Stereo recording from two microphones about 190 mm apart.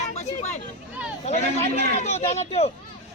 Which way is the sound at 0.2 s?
35° left (ahead or behind).